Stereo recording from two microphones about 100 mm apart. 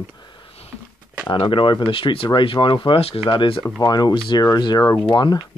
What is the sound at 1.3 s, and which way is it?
Speech, 55° left (ahead or behind).